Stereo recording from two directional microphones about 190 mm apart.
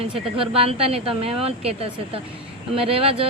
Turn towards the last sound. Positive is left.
turn(degrees=-30)  # may be behind; listen again after turning